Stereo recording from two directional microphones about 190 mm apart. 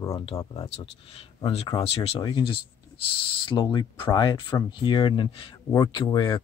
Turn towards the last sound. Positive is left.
turn(degrees=20)  # may be behind; listen again after turning